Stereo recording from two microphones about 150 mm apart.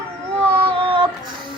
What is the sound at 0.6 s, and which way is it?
Child singing, 35° right (ahead or behind).